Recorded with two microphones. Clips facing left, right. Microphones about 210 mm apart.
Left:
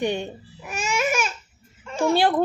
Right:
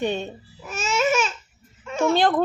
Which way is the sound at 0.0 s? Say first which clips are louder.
Even; 15° left (ahead or behind).